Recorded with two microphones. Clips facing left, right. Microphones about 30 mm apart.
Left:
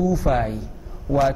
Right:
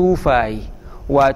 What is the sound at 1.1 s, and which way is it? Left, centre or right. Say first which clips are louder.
Speech: right 6 dB; centre.